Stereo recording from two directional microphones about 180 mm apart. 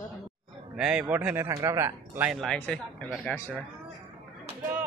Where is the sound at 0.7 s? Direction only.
5° right (ahead or behind).